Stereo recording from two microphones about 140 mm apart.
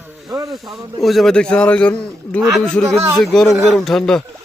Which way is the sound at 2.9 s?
15° right (ahead or behind).